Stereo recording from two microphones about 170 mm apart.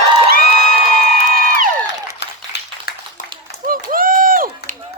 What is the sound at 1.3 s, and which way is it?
Crowd, 55° right (ahead or behind).